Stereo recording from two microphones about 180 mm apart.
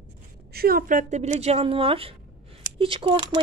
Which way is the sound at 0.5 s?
55° right (ahead or behind).